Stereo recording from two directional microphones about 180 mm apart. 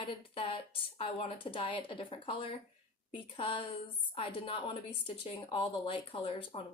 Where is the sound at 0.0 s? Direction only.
30° left (ahead or behind).